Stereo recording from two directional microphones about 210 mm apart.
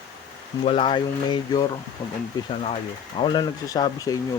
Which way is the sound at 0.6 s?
25° left (ahead or behind).